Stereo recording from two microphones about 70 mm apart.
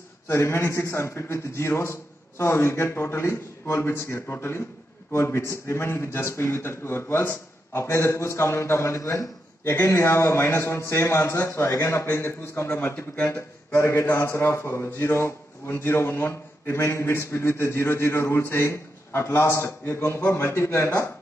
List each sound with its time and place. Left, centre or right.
0.3 s a man's voice: left
13.7 s a man's voice: left